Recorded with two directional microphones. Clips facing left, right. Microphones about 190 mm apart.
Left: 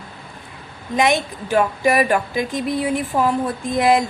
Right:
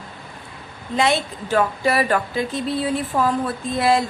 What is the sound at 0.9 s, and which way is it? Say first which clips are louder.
Speech: left 2 dB; 15° left (ahead or behind).